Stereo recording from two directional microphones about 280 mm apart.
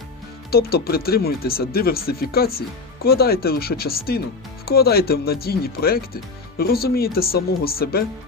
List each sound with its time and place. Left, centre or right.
0.5 s speech: left